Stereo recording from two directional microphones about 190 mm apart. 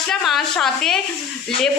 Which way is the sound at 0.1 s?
Centre (ahead or behind).